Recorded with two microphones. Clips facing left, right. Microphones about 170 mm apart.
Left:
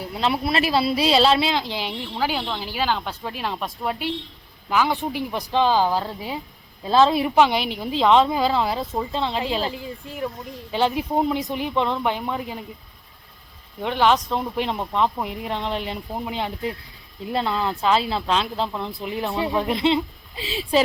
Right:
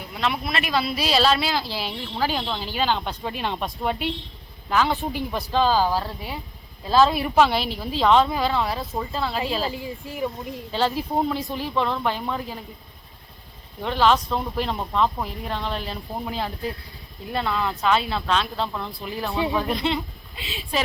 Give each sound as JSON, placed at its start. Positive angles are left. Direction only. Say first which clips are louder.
{"t": 0.1, "sound": "a woman's voice", "louder": "left 3 dB", "side_deg": 30}
{"t": 4.7, "sound": "a woman's voice", "louder": "left 1 dB", "side_deg": 10}
{"t": 9.6, "sound": "speech", "louder": "even", "side_deg": -5}
{"t": 10.7, "sound": "a woman's voice", "louder": "left 2 dB", "side_deg": 15}
{"t": 13.8, "sound": "a woman's voice", "louder": "left 1 dB", "side_deg": 15}
{"t": 19.3, "sound": "speech", "louder": "right 2 dB", "side_deg": 0}
{"t": 19.5, "sound": "speech", "louder": "left 4 dB", "side_deg": 25}